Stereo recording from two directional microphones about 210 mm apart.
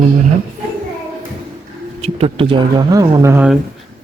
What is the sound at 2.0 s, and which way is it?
Speech, 30° right (ahead or behind).